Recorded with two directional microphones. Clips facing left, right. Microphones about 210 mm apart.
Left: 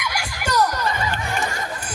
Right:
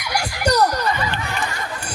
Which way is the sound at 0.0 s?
40° right (ahead or behind).